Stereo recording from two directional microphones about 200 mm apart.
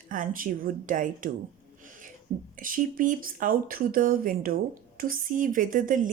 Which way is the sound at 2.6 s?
45° right (ahead or behind).